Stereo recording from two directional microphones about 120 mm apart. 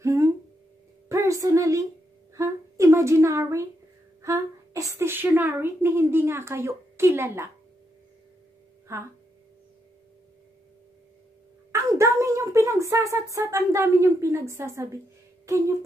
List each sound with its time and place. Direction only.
0.0 s a sound: 25° right (ahead or behind)
4.2 s a woman's voice: 25° right (ahead or behind)
8.9 s speech: 25° right (ahead or behind)
11.7 s a woman's voice: 25° right (ahead or behind)